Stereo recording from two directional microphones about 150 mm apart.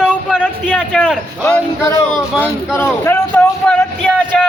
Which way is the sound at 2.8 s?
15° left (ahead or behind).